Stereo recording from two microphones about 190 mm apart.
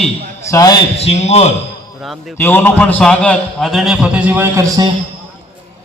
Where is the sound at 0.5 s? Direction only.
20° left (ahead or behind).